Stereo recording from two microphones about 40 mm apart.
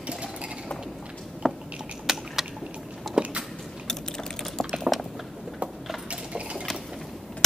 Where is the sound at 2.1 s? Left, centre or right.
Centre.